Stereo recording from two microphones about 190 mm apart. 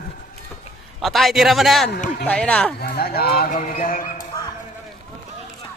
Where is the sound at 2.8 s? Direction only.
55° left (ahead or behind).